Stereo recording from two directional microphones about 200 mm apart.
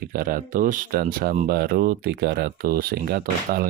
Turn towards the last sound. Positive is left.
turn(degrees=-45)  # may be behind; listen again after turning